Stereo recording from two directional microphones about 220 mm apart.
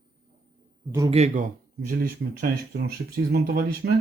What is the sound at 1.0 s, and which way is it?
Speech, 30° right (ahead or behind).